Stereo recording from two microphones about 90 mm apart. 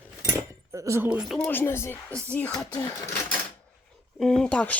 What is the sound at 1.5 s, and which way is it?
Speech, 25° left (ahead or behind).